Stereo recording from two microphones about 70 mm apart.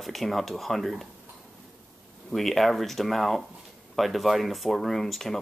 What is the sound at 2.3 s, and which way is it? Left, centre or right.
Speech, centre.